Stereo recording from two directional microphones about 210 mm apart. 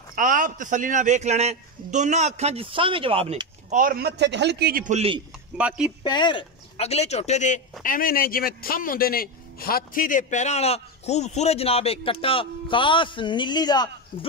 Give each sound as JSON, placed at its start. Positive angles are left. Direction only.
{"t": 0.1, "sound": "a man's voice", "side_deg": -40}
{"t": 5.6, "sound": "speech", "side_deg": -5}
{"t": 6.0, "sound": "a man's voice", "side_deg": 20}